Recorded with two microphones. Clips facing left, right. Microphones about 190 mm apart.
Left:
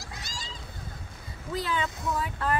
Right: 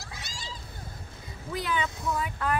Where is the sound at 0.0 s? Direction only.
65° right (ahead or behind).